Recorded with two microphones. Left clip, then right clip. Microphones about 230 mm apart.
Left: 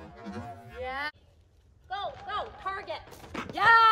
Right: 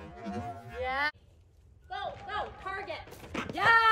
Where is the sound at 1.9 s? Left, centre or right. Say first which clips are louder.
Left 2 dB; centre.